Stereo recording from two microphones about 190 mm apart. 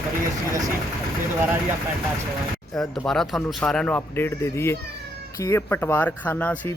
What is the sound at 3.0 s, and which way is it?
Speech, centre (ahead or behind).